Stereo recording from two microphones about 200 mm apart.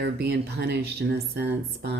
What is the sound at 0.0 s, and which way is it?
Speech, 55° right (ahead or behind).